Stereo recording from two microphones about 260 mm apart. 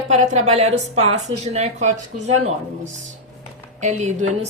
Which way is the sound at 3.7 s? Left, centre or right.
Right.